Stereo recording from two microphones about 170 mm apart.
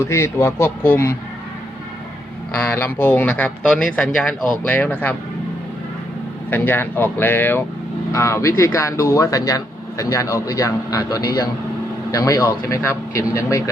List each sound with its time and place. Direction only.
0.0 s a man's voice: 15° left (ahead or behind)
2.5 s a man's voice: 10° left (ahead or behind)
6.5 s a man's voice: 10° left (ahead or behind)